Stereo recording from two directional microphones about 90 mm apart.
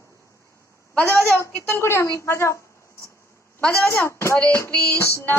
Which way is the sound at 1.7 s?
30° left (ahead or behind).